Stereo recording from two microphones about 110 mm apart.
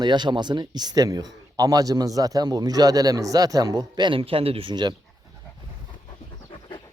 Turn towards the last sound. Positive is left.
turn(degrees=55)  # may be behind; listen again after turning